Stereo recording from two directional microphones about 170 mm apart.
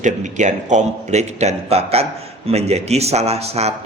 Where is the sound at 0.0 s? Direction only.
45° right (ahead or behind).